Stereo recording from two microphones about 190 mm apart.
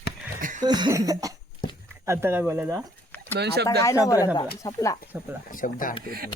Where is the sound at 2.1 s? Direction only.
10° right (ahead or behind).